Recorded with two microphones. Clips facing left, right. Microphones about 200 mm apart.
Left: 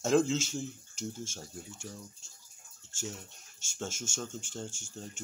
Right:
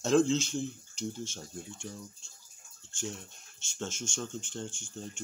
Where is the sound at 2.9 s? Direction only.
5° left (ahead or behind).